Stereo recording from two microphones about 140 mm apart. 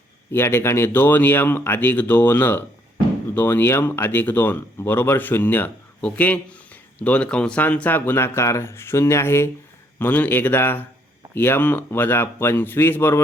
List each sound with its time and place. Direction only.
0.3 s speech: 15° left (ahead or behind)